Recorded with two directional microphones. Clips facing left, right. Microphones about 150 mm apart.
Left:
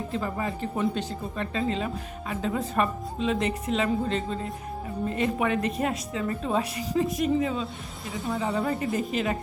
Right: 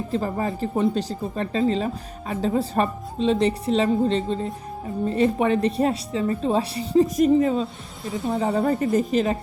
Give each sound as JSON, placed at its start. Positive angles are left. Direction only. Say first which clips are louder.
{"t": 0.1, "sound": "speech", "louder": "right 7 dB", "side_deg": -35}